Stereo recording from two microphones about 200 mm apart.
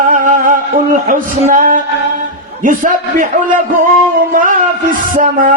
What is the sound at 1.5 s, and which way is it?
Female singing, 40° right (ahead or behind).